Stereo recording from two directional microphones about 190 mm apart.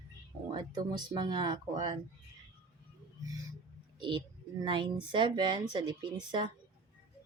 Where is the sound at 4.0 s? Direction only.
25° right (ahead or behind).